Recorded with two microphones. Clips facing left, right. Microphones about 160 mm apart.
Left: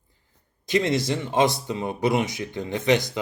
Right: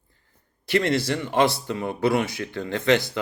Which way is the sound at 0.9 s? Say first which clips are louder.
Even; 20° left (ahead or behind).